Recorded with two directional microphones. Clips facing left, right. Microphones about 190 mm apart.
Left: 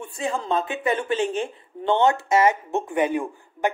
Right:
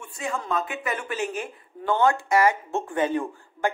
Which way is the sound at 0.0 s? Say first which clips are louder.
Left 4 dB; 30° left (ahead or behind).